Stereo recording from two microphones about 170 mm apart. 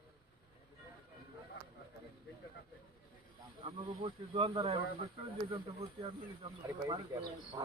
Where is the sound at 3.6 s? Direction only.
30° right (ahead or behind).